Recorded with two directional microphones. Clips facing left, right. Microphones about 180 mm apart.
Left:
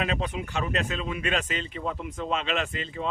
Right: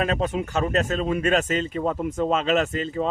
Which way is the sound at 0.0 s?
45° right (ahead or behind).